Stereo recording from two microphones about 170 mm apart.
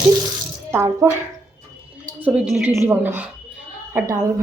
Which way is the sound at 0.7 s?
15° right (ahead or behind).